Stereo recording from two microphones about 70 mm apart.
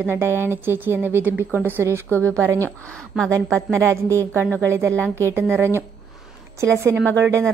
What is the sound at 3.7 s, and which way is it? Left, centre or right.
Speech, right.